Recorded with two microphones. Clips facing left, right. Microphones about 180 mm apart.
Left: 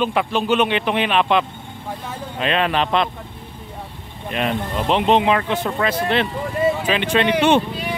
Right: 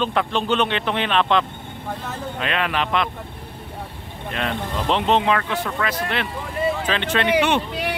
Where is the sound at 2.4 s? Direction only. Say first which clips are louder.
Left 5 dB; 30° left (ahead or behind).